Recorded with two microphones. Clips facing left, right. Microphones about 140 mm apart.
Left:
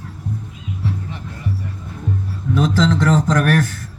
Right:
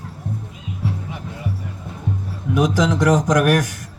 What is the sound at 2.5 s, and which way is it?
Speech, 15° right (ahead or behind).